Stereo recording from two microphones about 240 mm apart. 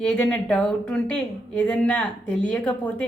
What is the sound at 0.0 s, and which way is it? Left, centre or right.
A woman's voice, centre.